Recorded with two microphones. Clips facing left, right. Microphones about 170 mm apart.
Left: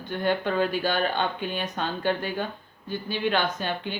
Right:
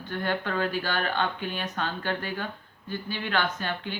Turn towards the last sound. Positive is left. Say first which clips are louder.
# left 2 dB
turn(degrees=20)  # may be behind; listen again after turning